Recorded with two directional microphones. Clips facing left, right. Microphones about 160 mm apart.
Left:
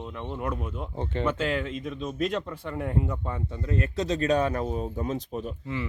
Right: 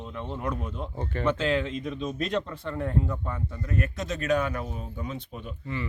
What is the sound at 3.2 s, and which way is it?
Speech, 25° left (ahead or behind).